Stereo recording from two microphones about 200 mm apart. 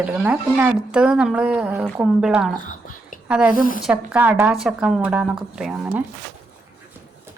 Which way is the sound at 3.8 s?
10° right (ahead or behind).